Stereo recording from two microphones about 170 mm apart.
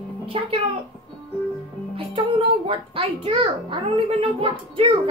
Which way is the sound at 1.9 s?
35° right (ahead or behind).